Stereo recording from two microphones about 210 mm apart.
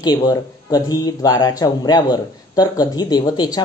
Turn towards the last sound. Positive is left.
turn(degrees=20)  # may be behind; listen again after turning